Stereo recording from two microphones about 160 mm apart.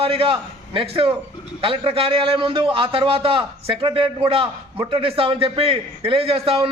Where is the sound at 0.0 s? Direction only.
35° right (ahead or behind).